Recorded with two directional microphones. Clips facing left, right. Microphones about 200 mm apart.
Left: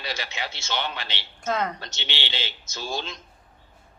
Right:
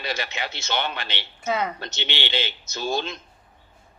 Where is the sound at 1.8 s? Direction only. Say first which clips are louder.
Right 5 dB; 55° right (ahead or behind).